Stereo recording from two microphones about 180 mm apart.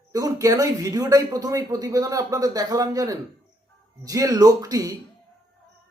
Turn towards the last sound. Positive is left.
turn(degrees=-20)  # may be behind; listen again after turning